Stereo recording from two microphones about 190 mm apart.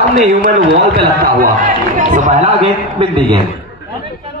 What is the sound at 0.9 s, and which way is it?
A man's voice, 50° right (ahead or behind).